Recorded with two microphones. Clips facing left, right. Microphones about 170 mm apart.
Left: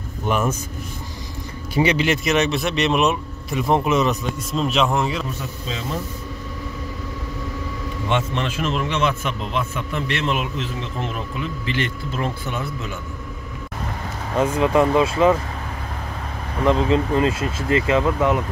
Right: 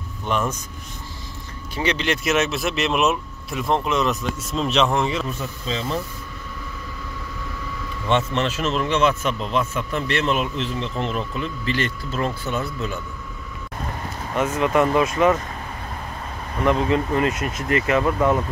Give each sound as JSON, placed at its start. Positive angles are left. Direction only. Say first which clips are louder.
{"t": 0.3, "sound": "a man's voice", "louder": "left 2 dB", "side_deg": 10}
{"t": 1.8, "sound": "speech", "louder": "left 4 dB", "side_deg": 10}
{"t": 8.1, "sound": "a man's voice", "louder": "right 2 dB", "side_deg": 10}
{"t": 14.3, "sound": "speech", "louder": "left 2 dB", "side_deg": 30}
{"t": 16.6, "sound": "speech", "louder": "left 2 dB", "side_deg": 30}